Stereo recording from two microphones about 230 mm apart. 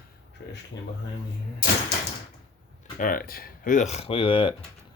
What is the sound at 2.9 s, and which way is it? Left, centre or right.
Speech, left.